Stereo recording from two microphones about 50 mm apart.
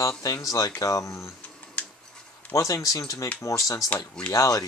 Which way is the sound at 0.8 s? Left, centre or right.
Left.